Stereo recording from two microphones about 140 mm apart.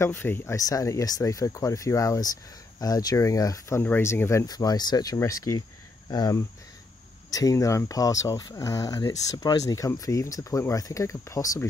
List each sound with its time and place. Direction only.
0.0 s speech: 15° left (ahead or behind)